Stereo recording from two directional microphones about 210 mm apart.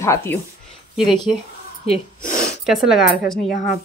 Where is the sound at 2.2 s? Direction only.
40° left (ahead or behind).